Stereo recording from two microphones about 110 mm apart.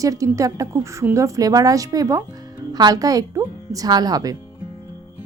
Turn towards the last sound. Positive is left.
turn(degrees=-35)  # may be behind; listen again after turning